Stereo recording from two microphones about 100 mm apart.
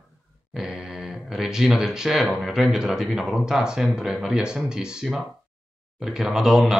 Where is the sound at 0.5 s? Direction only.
5° right (ahead or behind).